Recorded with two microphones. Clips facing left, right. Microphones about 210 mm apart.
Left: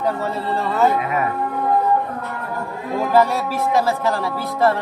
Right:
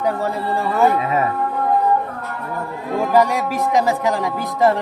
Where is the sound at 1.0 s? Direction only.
30° right (ahead or behind).